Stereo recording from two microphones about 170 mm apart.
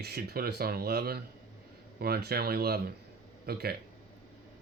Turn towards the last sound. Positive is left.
turn(degrees=-65)  # may be behind; listen again after turning